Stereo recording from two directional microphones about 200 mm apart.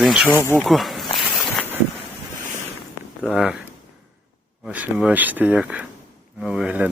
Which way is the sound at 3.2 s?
Centre (ahead or behind).